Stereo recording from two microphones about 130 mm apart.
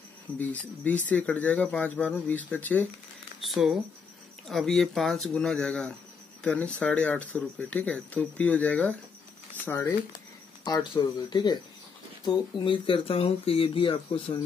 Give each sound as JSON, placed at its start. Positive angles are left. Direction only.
{"t": 0.4, "sound": "speech", "side_deg": 10}
{"t": 3.3, "sound": "speech", "side_deg": -5}
{"t": 9.7, "sound": "speech", "side_deg": 20}
{"t": 10.6, "sound": "speech", "side_deg": 35}